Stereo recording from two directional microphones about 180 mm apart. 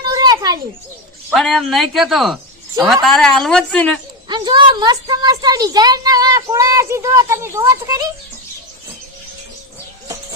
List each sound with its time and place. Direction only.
0.1 s children playing: 20° right (ahead or behind)
1.3 s speech: centre (ahead or behind)
4.3 s a woman's voice: 25° right (ahead or behind)